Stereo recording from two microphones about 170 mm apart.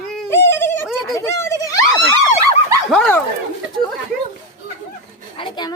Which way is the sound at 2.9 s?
5° left (ahead or behind).